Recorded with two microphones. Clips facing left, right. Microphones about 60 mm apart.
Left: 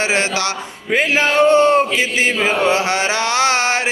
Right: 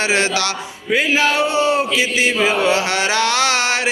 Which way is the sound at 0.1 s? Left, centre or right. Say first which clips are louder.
Even; left.